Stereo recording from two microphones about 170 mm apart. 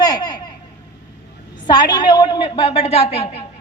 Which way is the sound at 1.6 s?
25° left (ahead or behind).